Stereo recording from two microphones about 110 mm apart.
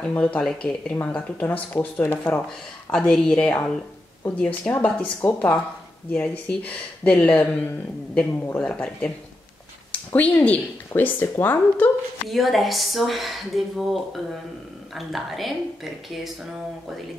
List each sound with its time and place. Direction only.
0.0 s speech: 10° left (ahead or behind)
2.9 s speech: 5° left (ahead or behind)
10.1 s speech: 15° left (ahead or behind)
12.3 s speech: centre (ahead or behind)